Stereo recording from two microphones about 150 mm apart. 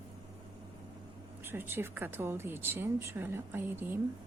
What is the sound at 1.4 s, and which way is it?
A woman's voice, 15° right (ahead or behind).